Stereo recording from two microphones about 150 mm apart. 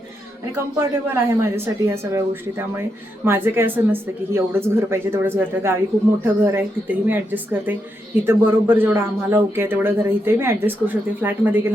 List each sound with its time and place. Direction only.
0.5 s a man's voice: 15° right (ahead or behind)
8.3 s a man's voice: 15° right (ahead or behind)